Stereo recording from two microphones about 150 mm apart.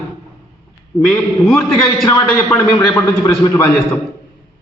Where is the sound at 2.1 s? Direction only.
20° left (ahead or behind).